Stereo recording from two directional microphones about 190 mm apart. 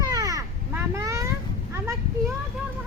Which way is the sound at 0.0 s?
20° right (ahead or behind).